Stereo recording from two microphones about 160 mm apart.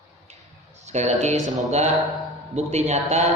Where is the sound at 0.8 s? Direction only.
45° right (ahead or behind).